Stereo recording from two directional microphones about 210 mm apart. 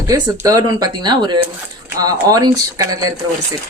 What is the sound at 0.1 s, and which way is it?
Speech, 15° right (ahead or behind).